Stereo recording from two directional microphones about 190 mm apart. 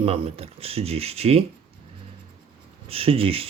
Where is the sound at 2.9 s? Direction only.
30° right (ahead or behind).